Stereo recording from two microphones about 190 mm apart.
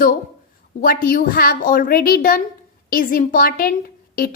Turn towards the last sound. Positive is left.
turn(degrees=50)  # may be behind; listen again after turning